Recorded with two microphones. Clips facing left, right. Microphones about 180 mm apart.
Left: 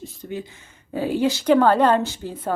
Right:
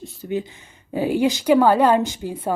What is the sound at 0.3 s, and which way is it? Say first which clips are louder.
A woman's voice: right 6 dB; 20° right (ahead or behind).